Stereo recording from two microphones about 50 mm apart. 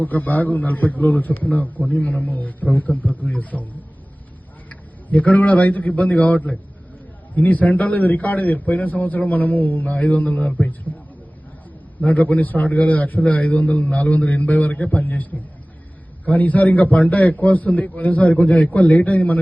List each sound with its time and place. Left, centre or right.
0.0 s a man's voice: left
5.0 s a man's voice: left
12.0 s a man's voice: left